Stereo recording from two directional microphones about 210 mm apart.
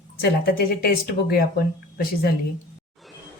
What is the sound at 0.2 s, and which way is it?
Speech, 45° left (ahead or behind).